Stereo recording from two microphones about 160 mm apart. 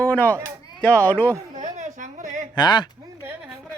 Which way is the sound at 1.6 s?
50° right (ahead or behind).